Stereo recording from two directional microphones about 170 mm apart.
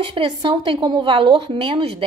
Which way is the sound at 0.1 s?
25° right (ahead or behind).